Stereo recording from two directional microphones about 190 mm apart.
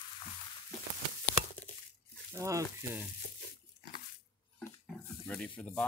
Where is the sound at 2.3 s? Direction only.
15° right (ahead or behind).